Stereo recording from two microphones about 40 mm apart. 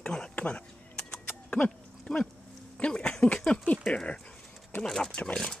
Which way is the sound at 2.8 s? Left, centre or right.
Left.